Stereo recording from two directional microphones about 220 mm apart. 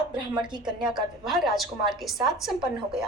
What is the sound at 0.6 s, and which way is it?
A woman's voice, 5° right (ahead or behind).